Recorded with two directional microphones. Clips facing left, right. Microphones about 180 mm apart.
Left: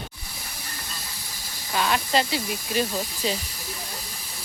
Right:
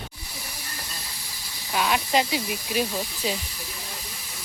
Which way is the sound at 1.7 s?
10° right (ahead or behind).